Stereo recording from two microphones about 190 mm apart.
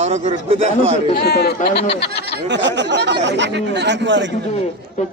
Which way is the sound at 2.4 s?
70° right (ahead or behind).